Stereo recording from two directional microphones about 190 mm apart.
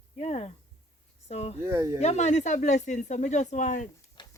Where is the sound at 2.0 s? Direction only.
35° left (ahead or behind).